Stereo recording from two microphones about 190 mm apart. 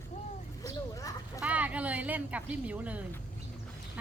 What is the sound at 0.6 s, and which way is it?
Speech, 15° left (ahead or behind).